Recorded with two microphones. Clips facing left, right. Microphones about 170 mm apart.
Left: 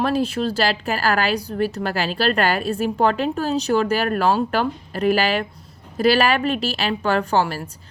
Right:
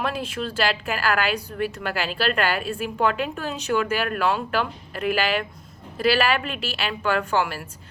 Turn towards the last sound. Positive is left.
turn(degrees=35)  # may be behind; listen again after turning